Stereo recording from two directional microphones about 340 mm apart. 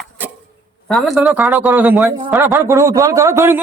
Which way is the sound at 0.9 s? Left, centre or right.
Centre.